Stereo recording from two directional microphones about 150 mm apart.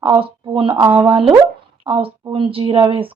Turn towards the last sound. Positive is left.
turn(degrees=-35)  # may be behind; listen again after turning